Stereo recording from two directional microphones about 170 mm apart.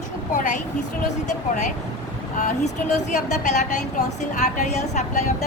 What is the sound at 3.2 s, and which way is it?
A woman's voice, 45° left (ahead or behind).